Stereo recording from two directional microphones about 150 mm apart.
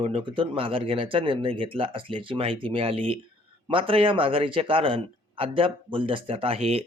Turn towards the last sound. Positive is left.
turn(degrees=-45)  # may be behind; listen again after turning